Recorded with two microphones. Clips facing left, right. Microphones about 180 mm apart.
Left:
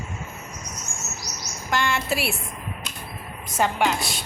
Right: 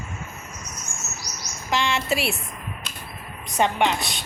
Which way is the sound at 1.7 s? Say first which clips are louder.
Right 1 dB; centre (ahead or behind).